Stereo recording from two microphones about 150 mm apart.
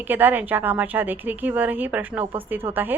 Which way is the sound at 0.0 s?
10° right (ahead or behind).